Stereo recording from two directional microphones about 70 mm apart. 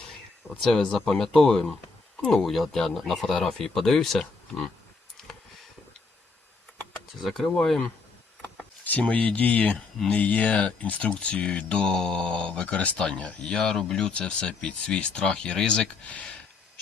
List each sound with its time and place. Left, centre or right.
0.6 s speech: centre
7.2 s speech: centre
8.8 s speech: left